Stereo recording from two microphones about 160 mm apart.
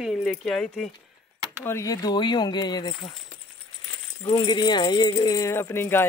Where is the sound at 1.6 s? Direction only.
15° left (ahead or behind).